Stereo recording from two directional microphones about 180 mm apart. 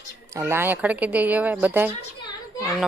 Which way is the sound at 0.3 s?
15° right (ahead or behind).